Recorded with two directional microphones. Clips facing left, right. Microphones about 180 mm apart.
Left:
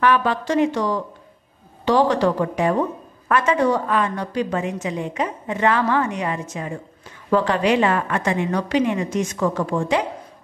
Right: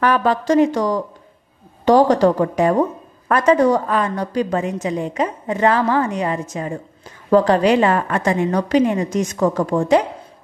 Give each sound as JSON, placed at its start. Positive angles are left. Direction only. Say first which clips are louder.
{"t": 0.0, "sound": "a woman's voice", "louder": "right 2 dB", "side_deg": -40}